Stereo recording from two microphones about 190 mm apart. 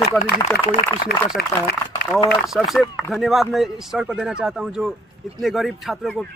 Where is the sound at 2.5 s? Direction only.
Centre (ahead or behind).